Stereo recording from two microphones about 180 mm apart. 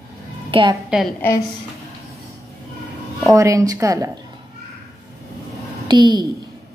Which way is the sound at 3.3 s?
15° right (ahead or behind).